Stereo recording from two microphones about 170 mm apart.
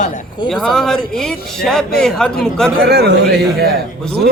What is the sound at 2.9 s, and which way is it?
Speech, 70° right (ahead or behind).